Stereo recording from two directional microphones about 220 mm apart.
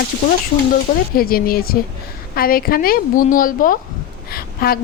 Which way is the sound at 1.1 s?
40° left (ahead or behind).